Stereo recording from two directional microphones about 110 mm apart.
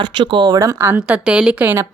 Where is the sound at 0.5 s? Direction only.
25° right (ahead or behind).